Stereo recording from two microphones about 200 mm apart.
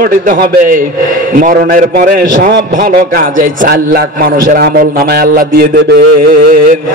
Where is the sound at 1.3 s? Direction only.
45° right (ahead or behind).